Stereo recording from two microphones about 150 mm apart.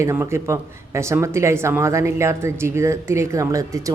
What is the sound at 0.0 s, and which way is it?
Speech, 15° right (ahead or behind).